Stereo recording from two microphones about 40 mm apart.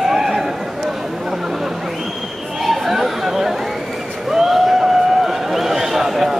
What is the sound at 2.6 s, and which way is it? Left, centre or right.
Chatter, centre.